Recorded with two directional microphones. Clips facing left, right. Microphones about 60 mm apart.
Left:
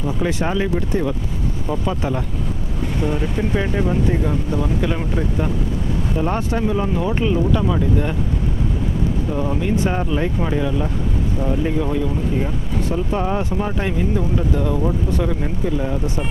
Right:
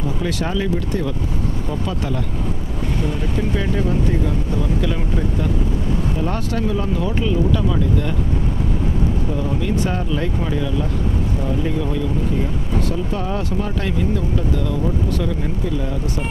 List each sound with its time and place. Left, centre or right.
0.2 s speech: left
9.4 s speech: left